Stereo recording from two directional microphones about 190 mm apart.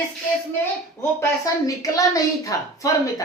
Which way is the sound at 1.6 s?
15° left (ahead or behind).